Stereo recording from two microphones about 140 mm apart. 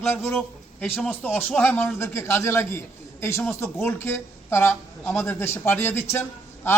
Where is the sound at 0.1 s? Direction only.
20° left (ahead or behind).